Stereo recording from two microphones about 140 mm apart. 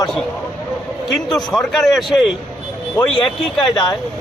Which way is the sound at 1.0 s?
Centre (ahead or behind).